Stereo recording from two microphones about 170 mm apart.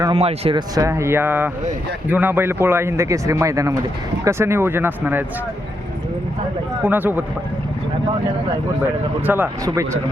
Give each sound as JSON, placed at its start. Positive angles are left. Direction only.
{"t": 0.1, "sound": "speech", "side_deg": -35}
{"t": 0.8, "sound": "speech", "side_deg": -15}
{"t": 6.8, "sound": "speech", "side_deg": -10}
{"t": 9.2, "sound": "speech", "side_deg": -10}